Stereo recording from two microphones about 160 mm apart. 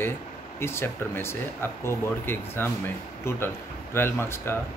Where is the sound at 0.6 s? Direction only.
15° left (ahead or behind).